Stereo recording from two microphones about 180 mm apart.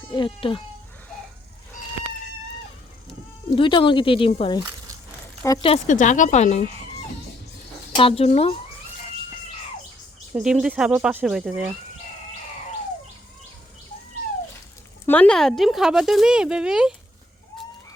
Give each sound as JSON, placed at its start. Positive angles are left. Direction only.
{"t": 0.1, "sound": "speech", "side_deg": 30}
{"t": 3.5, "sound": "speech", "side_deg": 30}
{"t": 5.6, "sound": "a woman's voice", "side_deg": 40}
{"t": 7.9, "sound": "a woman's voice", "side_deg": 30}
{"t": 10.3, "sound": "speech", "side_deg": -5}
{"t": 15.0, "sound": "speech", "side_deg": 10}